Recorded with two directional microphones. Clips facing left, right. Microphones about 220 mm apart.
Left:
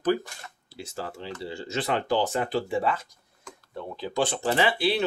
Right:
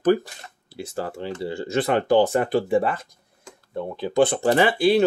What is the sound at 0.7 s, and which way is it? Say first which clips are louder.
Speech: right 6 dB; 55° right (ahead or behind).